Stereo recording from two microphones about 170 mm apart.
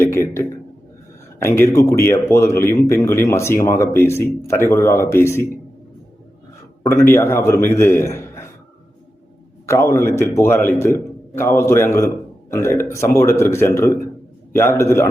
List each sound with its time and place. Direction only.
0.0 s a man's voice: 15° left (ahead or behind)
6.9 s speech: 15° left (ahead or behind)
9.6 s speech: 15° left (ahead or behind)